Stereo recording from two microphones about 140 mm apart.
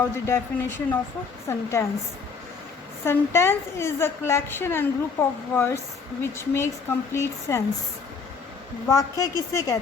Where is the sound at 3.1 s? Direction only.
15° left (ahead or behind).